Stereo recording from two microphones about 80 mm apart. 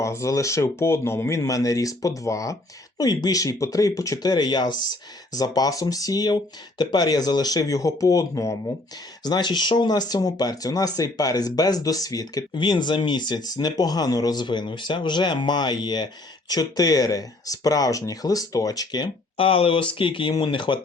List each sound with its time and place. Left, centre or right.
0.0 s speech: left
3.0 s speech: left
5.4 s speech: left
9.2 s speech: left
12.5 s speech: left
19.9 s speech: left